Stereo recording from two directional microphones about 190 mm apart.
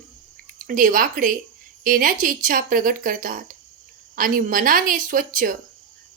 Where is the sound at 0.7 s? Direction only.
45° right (ahead or behind).